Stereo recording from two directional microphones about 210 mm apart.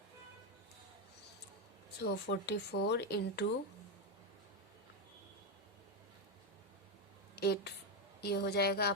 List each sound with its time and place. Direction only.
2.0 s speech: 55° left (ahead or behind)
7.3 s a woman's voice: 50° left (ahead or behind)